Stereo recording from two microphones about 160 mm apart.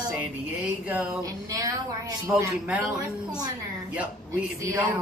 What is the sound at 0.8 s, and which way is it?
Speech, 10° right (ahead or behind).